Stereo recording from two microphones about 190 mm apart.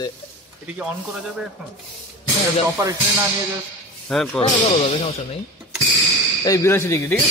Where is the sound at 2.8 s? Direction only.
15° right (ahead or behind).